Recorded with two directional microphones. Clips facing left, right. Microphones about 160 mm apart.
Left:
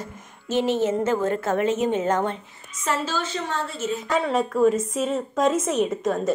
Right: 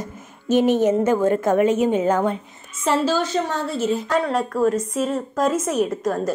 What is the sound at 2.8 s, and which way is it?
A woman's voice, 35° right (ahead or behind).